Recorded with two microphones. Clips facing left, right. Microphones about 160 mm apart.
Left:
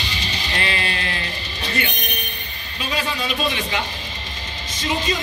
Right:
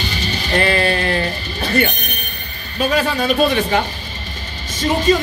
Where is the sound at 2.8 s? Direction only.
45° right (ahead or behind).